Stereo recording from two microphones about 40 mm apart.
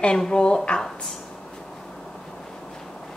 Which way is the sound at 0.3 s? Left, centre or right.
Left.